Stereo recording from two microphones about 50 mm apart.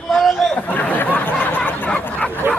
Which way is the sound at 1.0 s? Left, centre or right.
Left.